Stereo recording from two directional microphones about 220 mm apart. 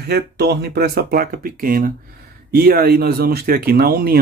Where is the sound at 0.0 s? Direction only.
45° right (ahead or behind).